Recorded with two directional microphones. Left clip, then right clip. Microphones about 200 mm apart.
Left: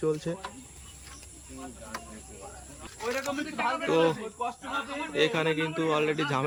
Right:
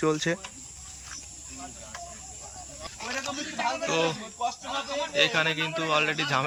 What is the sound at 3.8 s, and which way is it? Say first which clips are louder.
Speech: left 2 dB; 10° left (ahead or behind).